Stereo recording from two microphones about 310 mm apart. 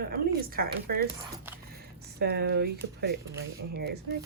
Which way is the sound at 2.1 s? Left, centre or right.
Right.